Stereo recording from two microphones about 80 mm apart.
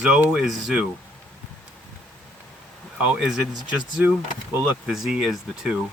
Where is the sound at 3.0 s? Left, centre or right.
Centre.